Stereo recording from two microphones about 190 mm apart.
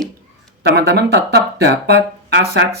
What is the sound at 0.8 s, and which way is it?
Speech, 60° right (ahead or behind).